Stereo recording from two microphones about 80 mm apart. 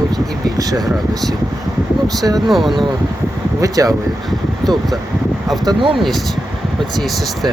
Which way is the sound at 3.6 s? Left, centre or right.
Right.